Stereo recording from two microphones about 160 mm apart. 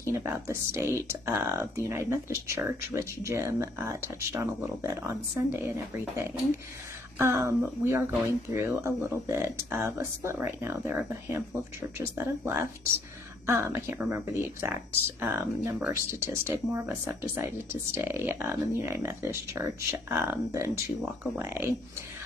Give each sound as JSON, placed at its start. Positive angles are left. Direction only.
{"t": 0.0, "sound": "speech", "side_deg": -15}